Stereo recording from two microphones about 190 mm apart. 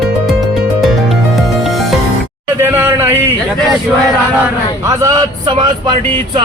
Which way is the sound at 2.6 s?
10° right (ahead or behind).